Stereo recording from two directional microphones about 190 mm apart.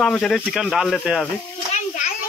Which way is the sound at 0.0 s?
5° left (ahead or behind).